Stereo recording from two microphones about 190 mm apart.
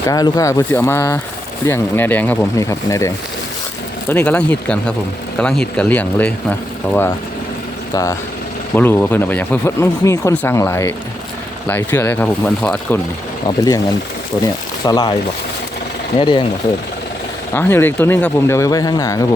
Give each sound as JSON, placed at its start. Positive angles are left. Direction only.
{"t": 0.1, "sound": "speech", "side_deg": 20}
{"t": 4.1, "sound": "speech", "side_deg": 10}
{"t": 14.4, "sound": "speech", "side_deg": 20}
{"t": 16.1, "sound": "speech", "side_deg": 25}
{"t": 17.5, "sound": "speech", "side_deg": 10}